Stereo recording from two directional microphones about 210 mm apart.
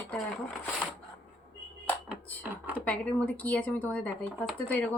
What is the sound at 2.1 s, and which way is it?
Speech, 10° right (ahead or behind).